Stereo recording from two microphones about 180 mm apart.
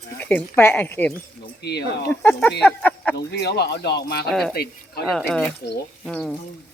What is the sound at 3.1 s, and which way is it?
Speech, 70° left (ahead or behind).